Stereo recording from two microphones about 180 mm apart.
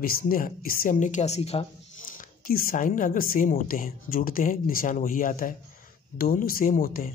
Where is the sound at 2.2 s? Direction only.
55° left (ahead or behind).